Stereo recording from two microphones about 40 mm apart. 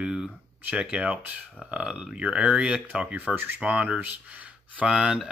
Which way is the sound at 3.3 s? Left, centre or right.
Right.